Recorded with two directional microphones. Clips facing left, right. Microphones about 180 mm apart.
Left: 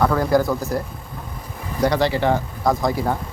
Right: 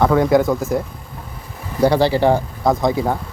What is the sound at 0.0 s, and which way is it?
Speech, 20° right (ahead or behind).